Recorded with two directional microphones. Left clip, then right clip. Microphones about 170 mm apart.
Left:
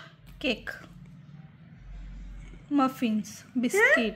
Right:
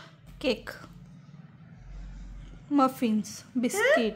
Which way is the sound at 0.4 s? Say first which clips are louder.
Right 1 dB; 20° right (ahead or behind).